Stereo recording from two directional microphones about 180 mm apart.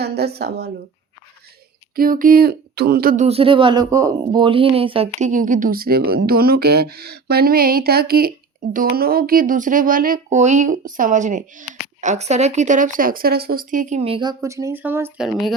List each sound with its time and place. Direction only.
0.0 s speech: 65° right (ahead or behind)
2.0 s speech: 50° right (ahead or behind)
3.2 s speech: 30° right (ahead or behind)
5.3 s speech: 45° right (ahead or behind); by 15.3 s 10° right (ahead or behind)